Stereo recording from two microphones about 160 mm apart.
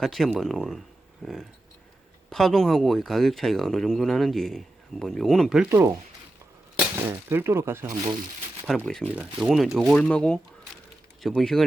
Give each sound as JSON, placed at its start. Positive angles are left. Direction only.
{"t": 0.0, "sound": "speech", "side_deg": 0}
{"t": 5.6, "sound": "speech", "side_deg": -15}
{"t": 8.6, "sound": "speech", "side_deg": 0}